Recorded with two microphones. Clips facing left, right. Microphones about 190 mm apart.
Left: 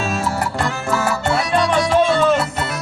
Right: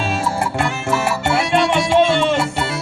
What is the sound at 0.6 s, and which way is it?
Music, 25° right (ahead or behind).